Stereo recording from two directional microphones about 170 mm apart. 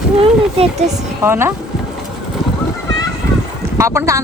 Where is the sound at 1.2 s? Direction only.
15° right (ahead or behind).